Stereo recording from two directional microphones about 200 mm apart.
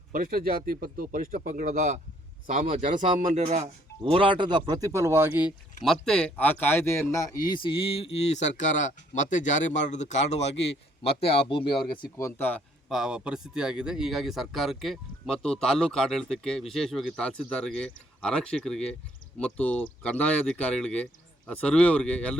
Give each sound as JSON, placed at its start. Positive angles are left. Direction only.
{"t": 0.1, "sound": "speech", "side_deg": -45}
{"t": 3.2, "sound": "speech", "side_deg": -40}
{"t": 12.1, "sound": "speech", "side_deg": 10}